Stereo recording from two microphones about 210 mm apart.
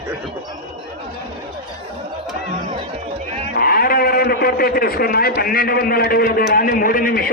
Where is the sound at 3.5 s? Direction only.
45° left (ahead or behind).